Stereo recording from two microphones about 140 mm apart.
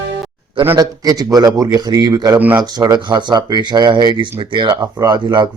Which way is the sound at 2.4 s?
10° right (ahead or behind).